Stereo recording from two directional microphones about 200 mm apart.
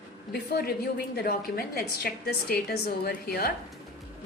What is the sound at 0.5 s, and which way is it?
A woman's voice, 55° left (ahead or behind).